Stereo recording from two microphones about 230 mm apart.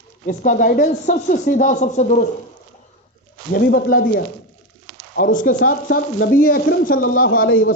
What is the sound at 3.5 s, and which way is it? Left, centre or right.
A man's voice, left.